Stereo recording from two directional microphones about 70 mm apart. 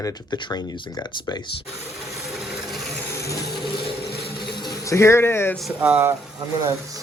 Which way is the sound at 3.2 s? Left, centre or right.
Left.